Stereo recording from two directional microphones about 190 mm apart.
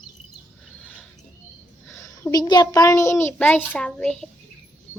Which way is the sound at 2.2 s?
20° left (ahead or behind).